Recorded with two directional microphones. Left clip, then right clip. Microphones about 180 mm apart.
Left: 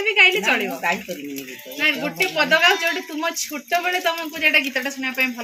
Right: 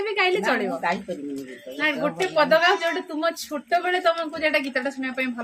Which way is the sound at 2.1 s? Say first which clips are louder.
Left 1 dB; 20° right (ahead or behind).